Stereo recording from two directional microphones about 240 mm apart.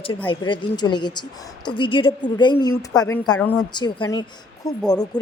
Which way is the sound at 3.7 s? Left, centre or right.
Centre.